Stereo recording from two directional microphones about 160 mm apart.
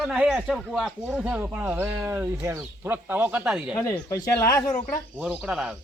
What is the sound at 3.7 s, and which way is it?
Speech, 20° left (ahead or behind).